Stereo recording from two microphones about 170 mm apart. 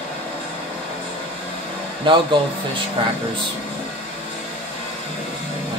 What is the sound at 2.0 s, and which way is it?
Speech, 30° right (ahead or behind).